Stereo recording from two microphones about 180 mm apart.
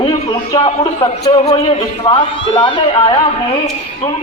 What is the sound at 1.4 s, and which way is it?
A man's voice, 35° left (ahead or behind).